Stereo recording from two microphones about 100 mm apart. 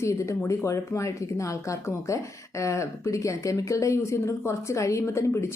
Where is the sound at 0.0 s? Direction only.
30° left (ahead or behind).